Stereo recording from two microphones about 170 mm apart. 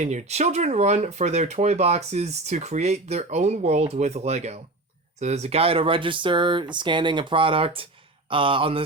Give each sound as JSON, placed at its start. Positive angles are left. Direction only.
{"t": 0.0, "sound": "speech", "side_deg": -45}